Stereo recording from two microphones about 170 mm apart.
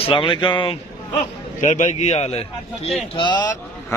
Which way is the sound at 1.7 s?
40° left (ahead or behind).